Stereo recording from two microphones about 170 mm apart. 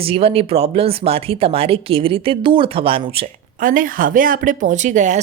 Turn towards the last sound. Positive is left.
turn(degrees=-45)  # may be behind; listen again after turning